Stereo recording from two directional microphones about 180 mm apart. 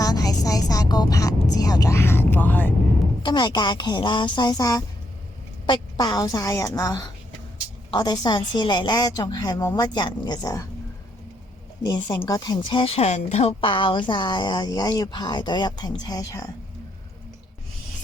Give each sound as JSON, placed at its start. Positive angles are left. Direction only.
{"t": 0.0, "sound": "a sound", "side_deg": 20}
{"t": 1.5, "sound": "music", "side_deg": 20}
{"t": 3.2, "sound": "speech", "side_deg": 25}
{"t": 11.8, "sound": "speech", "side_deg": 20}